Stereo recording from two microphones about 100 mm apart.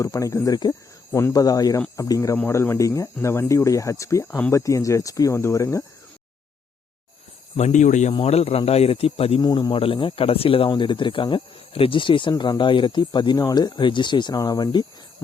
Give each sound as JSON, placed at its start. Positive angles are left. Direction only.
{"t": 0.0, "sound": "speech", "side_deg": 35}
{"t": 4.3, "sound": "speech", "side_deg": 15}
{"t": 4.5, "sound": "speech", "side_deg": 35}
{"t": 8.2, "sound": "speech", "side_deg": 85}
{"t": 9.4, "sound": "speech", "side_deg": 40}
{"t": 9.7, "sound": "speech", "side_deg": 60}
{"t": 14.3, "sound": "speech", "side_deg": 40}